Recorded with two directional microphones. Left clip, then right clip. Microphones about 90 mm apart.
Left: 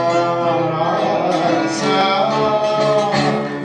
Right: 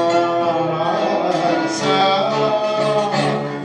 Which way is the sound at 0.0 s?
40° right (ahead or behind).